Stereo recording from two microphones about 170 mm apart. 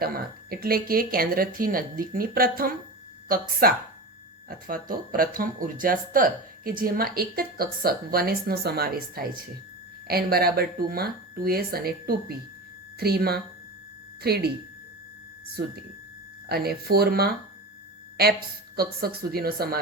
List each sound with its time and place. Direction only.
0.0 s a woman's voice: 65° right (ahead or behind)
15.6 s a woman's voice: 65° right (ahead or behind)
18.8 s a woman's voice: 65° right (ahead or behind)